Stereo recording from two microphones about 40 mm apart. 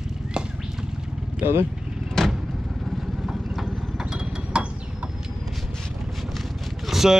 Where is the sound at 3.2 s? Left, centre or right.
Centre.